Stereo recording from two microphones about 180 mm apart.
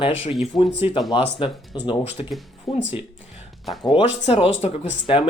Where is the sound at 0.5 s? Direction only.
25° left (ahead or behind).